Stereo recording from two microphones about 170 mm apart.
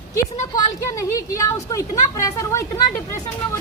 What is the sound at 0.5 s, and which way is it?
A woman's voice, 20° left (ahead or behind).